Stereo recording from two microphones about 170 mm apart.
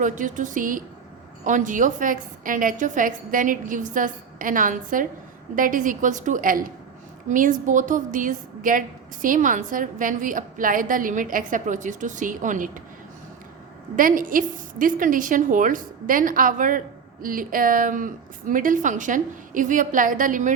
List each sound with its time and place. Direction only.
0.0 s a woman's voice: 50° right (ahead or behind)
13.9 s a woman's voice: 55° right (ahead or behind)